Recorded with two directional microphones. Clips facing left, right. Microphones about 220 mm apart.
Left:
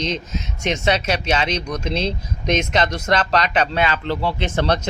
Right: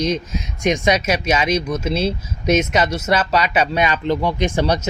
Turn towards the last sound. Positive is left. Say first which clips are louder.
# right 2 dB
turn(degrees=-10)  # may be behind; listen again after turning